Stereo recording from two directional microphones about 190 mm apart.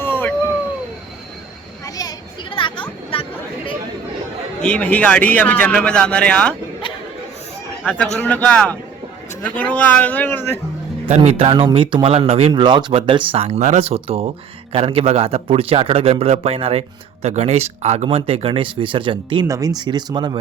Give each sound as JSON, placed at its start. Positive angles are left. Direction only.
{"t": 0.0, "sound": "cat", "side_deg": 10}
{"t": 2.0, "sound": "children playing", "side_deg": 20}
{"t": 4.6, "sound": "speech", "side_deg": 5}
{"t": 7.9, "sound": "speech", "side_deg": 5}
{"t": 11.0, "sound": "speech", "side_deg": -30}